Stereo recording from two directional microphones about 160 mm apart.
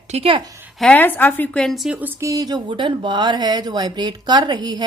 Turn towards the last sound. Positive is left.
turn(degrees=-25)  # may be behind; listen again after turning